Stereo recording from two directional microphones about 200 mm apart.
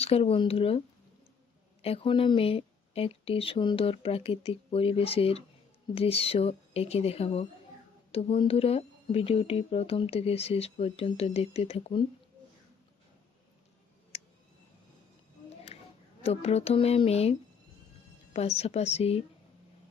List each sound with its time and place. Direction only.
0.0 s speech: 30° left (ahead or behind)
1.8 s a woman's voice: 30° left (ahead or behind)
14.1 s clicking: 30° left (ahead or behind)
16.2 s a woman's voice: 30° left (ahead or behind)
18.3 s a woman's voice: 30° left (ahead or behind)